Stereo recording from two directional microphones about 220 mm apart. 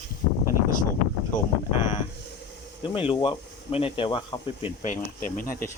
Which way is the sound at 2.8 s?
25° left (ahead or behind).